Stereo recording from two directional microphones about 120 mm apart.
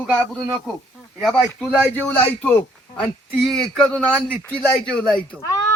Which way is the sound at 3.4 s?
Centre (ahead or behind).